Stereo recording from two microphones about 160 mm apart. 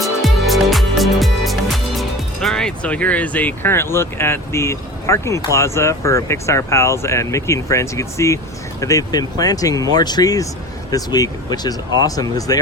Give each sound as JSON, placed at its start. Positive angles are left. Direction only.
{"t": 0.0, "sound": "music", "side_deg": 0}
{"t": 8.8, "sound": "speech", "side_deg": 20}